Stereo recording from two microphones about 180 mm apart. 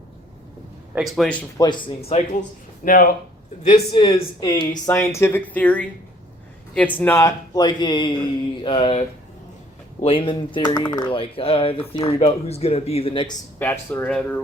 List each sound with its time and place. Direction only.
0.9 s a man's voice: centre (ahead or behind)
1.5 s speech: 25° left (ahead or behind)
2.8 s speech: 50° left (ahead or behind)
3.7 s speech: 25° left (ahead or behind)
13.6 s speech: 10° left (ahead or behind)